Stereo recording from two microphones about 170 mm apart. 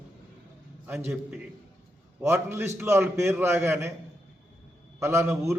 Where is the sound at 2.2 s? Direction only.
15° right (ahead or behind).